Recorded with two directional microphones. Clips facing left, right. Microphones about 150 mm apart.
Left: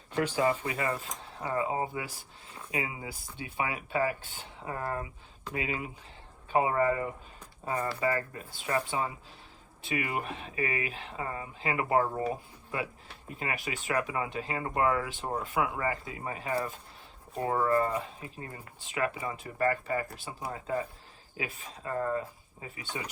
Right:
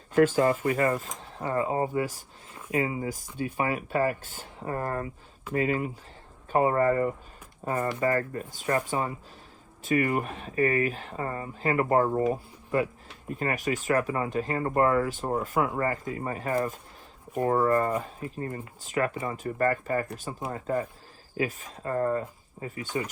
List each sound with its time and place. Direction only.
0.2 s speech: 45° right (ahead or behind)